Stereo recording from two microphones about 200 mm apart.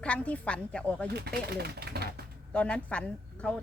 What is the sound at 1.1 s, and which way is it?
Speech, 55° right (ahead or behind).